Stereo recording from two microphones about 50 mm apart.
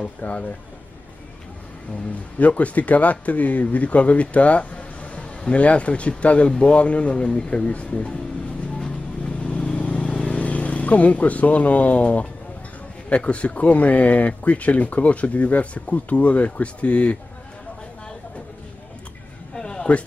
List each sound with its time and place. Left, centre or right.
0.2 s speech: left
2.3 s speech: left
8.7 s vehicle: left
13.1 s speech: left
19.5 s a sound: centre